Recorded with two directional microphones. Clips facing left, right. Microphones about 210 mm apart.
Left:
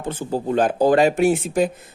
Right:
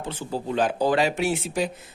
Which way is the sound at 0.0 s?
50° left (ahead or behind).